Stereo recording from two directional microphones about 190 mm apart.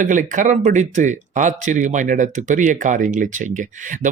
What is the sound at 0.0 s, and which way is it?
Speech, 40° right (ahead or behind).